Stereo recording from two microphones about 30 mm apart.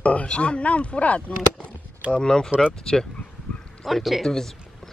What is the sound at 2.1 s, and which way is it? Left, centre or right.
Speech, left.